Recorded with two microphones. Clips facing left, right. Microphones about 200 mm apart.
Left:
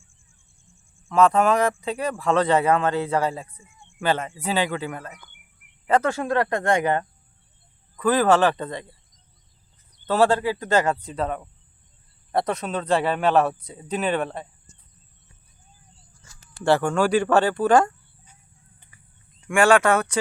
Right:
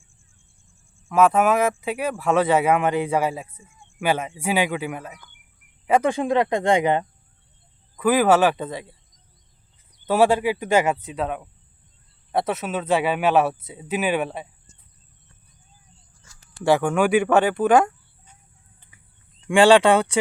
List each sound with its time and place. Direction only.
1.0 s speech: 5° right (ahead or behind)
10.1 s speech: 10° right (ahead or behind)
17.0 s speech: 20° right (ahead or behind)
19.6 s speech: 30° right (ahead or behind)